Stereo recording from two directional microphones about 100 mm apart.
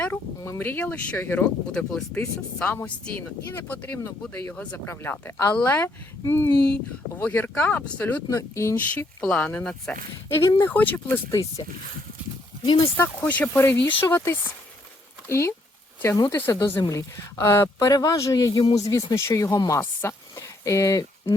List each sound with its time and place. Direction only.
0.6 s speech: 20° left (ahead or behind)
1.5 s speech: 5° left (ahead or behind)
2.1 s speech: 15° left (ahead or behind)
5.2 s speech: 25° left (ahead or behind)
8.3 s speech: 30° left (ahead or behind)
8.7 s speech: 15° left (ahead or behind)
11.3 s speech: 35° left (ahead or behind)
12.6 s speech: 60° left (ahead or behind)
13.0 s speech: 15° left (ahead or behind); by 19.8 s 35° left (ahead or behind)
19.8 s speech: 25° left (ahead or behind)